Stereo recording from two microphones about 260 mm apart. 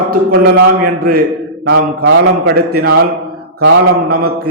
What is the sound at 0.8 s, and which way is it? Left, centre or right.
A man's voice, right.